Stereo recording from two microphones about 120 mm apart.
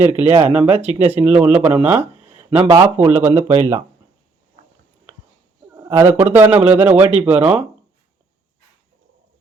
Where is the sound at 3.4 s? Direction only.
65° right (ahead or behind).